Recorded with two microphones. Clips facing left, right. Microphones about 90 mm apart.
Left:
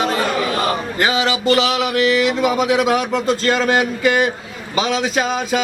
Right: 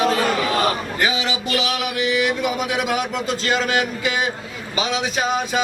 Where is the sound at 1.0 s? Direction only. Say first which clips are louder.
Left 7 dB; 60° left (ahead or behind); by 3.0 s 80° left.